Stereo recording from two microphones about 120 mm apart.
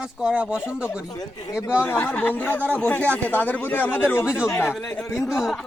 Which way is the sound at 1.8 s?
20° left (ahead or behind).